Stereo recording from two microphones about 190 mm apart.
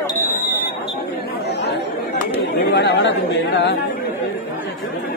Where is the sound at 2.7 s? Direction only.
65° left (ahead or behind).